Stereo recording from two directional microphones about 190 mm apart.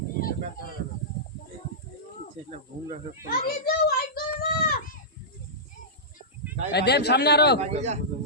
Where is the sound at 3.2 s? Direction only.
55° left (ahead or behind).